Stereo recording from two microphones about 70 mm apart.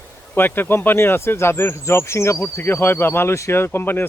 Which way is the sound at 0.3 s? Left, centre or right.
Left.